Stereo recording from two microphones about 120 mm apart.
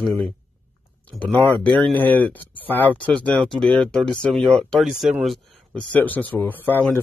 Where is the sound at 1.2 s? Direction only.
15° left (ahead or behind); by 5.1 s centre (ahead or behind).